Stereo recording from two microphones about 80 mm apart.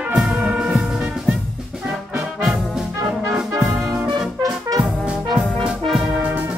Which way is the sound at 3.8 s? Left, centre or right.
Right.